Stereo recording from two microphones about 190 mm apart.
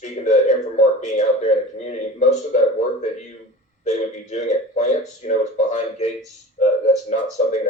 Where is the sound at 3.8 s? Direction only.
35° left (ahead or behind).